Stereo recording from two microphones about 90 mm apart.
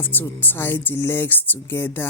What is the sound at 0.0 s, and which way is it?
Speech, 20° left (ahead or behind).